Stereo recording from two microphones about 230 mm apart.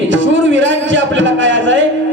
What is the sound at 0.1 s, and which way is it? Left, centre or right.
A man's voice, right.